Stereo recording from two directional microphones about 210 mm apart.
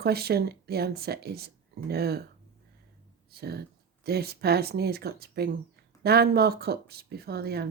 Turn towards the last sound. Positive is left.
turn(degrees=-50)  # may be behind; listen again after turning